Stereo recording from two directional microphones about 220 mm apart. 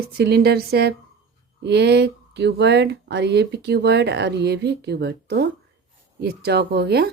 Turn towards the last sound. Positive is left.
turn(degrees=-50)  # may be behind; listen again after turning